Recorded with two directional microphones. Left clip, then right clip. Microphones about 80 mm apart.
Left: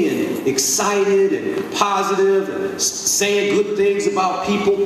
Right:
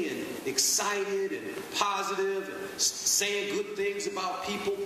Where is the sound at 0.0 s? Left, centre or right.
Right.